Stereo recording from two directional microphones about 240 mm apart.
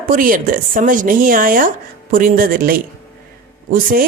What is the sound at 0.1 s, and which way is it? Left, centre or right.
A woman's voice, right.